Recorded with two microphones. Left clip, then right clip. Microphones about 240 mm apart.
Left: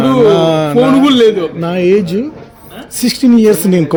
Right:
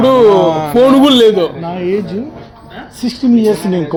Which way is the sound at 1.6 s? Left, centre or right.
Left.